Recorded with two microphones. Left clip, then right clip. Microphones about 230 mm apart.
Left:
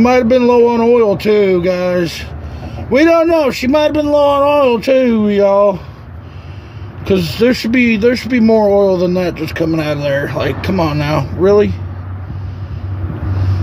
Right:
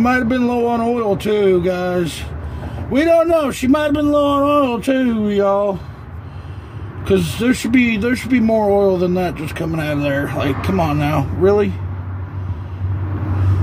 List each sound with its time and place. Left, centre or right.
0.0 s a man's voice: left
7.1 s a man's voice: left